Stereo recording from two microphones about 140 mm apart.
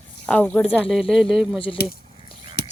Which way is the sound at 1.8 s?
90° left.